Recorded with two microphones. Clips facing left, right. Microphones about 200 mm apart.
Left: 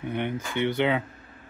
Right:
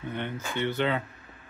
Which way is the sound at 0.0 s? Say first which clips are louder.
Left 4 dB; 15° left (ahead or behind).